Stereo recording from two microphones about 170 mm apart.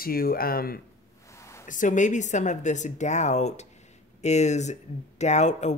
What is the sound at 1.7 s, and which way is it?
Speech, 50° left (ahead or behind).